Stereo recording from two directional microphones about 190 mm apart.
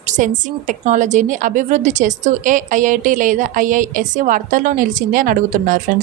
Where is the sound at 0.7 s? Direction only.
40° right (ahead or behind).